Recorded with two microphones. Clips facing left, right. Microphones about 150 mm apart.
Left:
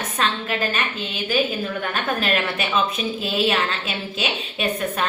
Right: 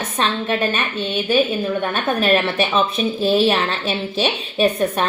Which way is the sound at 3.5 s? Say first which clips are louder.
Right 4 dB; 35° right (ahead or behind).